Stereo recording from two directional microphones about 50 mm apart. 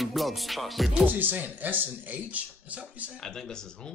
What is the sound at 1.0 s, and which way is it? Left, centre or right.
Speech, right.